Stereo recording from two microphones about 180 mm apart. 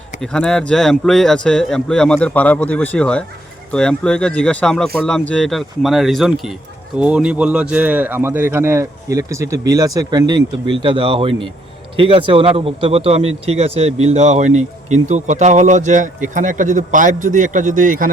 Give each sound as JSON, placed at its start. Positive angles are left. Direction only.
{"t": 0.2, "sound": "speech", "side_deg": 5}